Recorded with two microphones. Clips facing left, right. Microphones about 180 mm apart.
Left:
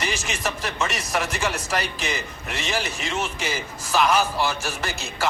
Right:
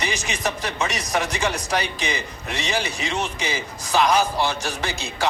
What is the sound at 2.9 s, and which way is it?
A man's voice, 15° right (ahead or behind).